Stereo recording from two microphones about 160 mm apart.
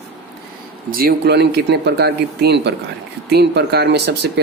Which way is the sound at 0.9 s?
65° right (ahead or behind).